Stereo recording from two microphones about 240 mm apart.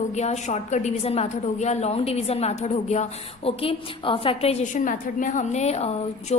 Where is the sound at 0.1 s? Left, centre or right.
Left.